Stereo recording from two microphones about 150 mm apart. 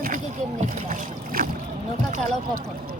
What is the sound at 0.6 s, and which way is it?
Boat, 60° right (ahead or behind).